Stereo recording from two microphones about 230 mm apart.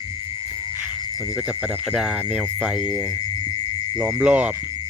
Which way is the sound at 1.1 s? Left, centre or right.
Centre.